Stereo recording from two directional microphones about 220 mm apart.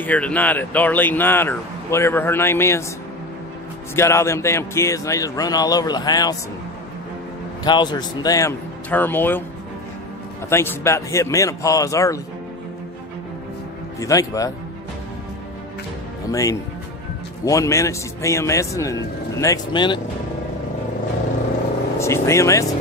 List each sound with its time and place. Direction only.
0.0 s speech: 5° left (ahead or behind)
3.9 s speech: 10° left (ahead or behind)
7.6 s speech: 20° left (ahead or behind)
10.5 s speech: 10° left (ahead or behind)
13.9 s speech: 15° left (ahead or behind)
16.3 s speech: 15° left (ahead or behind)
21.9 s speech: 10° left (ahead or behind)